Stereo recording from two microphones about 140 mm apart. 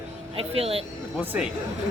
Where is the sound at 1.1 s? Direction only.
10° right (ahead or behind).